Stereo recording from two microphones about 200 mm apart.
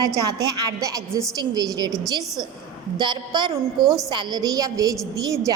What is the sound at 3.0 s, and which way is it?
A woman's voice, 20° right (ahead or behind).